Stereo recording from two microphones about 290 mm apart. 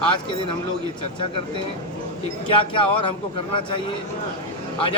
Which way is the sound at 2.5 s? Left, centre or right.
Centre.